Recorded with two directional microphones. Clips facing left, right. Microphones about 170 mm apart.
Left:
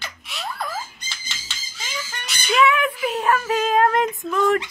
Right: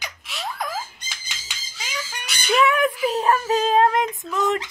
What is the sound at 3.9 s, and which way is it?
Speech, 15° right (ahead or behind).